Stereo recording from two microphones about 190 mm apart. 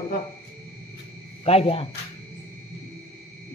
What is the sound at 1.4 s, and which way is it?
Speech, 30° left (ahead or behind).